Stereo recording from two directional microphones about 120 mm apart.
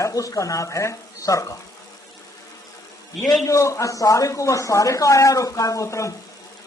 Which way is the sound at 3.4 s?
25° left (ahead or behind).